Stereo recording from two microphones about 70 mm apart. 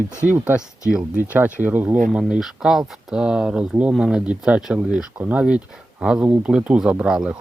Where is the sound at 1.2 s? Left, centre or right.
Right.